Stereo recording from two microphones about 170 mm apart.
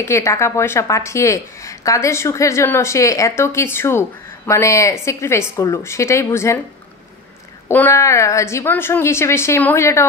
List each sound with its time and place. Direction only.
0.0 s a woman's voice: 15° left (ahead or behind)
7.6 s a woman's voice: 15° left (ahead or behind)